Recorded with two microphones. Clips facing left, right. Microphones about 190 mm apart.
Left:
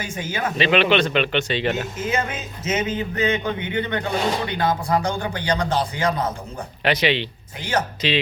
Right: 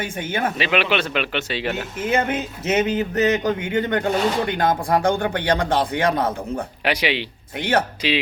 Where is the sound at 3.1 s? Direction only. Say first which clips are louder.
Right 3 dB; 40° right (ahead or behind); by 6.6 s 60° right (ahead or behind).